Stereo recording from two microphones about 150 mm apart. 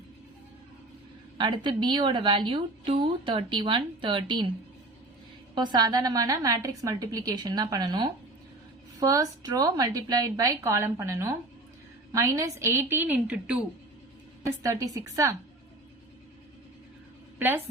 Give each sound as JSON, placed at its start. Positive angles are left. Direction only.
{"t": 1.4, "sound": "a woman's voice", "side_deg": -30}
{"t": 5.5, "sound": "a woman's voice", "side_deg": -30}
{"t": 14.4, "sound": "a woman's voice", "side_deg": -20}